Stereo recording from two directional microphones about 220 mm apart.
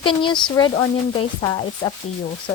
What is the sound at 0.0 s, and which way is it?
Speech, 20° left (ahead or behind).